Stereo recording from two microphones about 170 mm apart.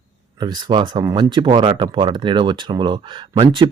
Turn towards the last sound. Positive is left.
turn(degrees=-30)  # may be behind; listen again after turning